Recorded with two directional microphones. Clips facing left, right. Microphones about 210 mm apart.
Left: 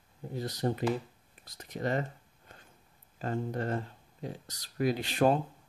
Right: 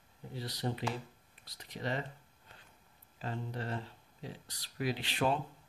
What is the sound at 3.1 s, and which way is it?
Speech, 45° left (ahead or behind).